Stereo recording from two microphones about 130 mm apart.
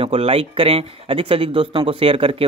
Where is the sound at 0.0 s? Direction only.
45° right (ahead or behind).